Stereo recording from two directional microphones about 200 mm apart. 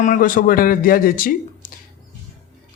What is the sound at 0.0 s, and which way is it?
Speech, 40° left (ahead or behind).